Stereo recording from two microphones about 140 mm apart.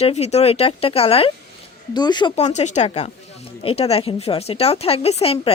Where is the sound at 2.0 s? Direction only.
30° left (ahead or behind).